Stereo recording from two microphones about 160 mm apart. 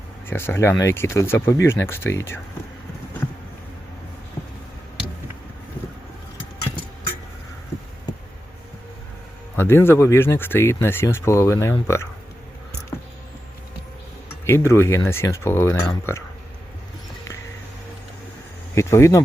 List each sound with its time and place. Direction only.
0.3 s speech: 15° left (ahead or behind)
9.6 s speech: 15° left (ahead or behind)
14.4 s speech: 15° left (ahead or behind)
18.7 s speech: 15° left (ahead or behind)